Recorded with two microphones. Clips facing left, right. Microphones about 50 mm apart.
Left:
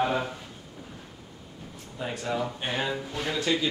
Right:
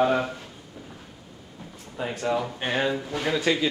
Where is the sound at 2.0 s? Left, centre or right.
Right.